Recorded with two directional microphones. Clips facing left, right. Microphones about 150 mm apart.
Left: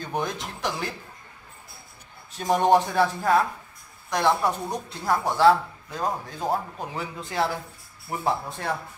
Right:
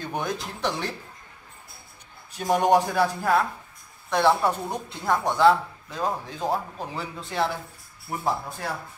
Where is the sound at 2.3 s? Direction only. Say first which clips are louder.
Even; 10° right (ahead or behind).